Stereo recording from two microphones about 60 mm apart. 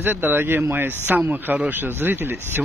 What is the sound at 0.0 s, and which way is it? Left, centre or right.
A man's voice, right.